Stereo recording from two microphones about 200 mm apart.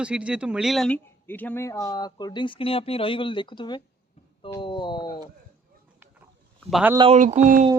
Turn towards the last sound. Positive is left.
turn(degrees=-40)  # may be behind; listen again after turning